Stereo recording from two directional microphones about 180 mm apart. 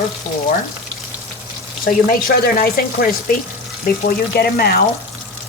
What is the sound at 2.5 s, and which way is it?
Speech, 55° left (ahead or behind).